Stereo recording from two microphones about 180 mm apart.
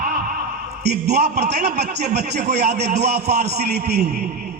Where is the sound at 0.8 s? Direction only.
65° right (ahead or behind).